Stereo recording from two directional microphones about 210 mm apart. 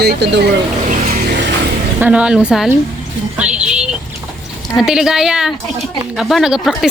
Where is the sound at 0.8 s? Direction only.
40° right (ahead or behind).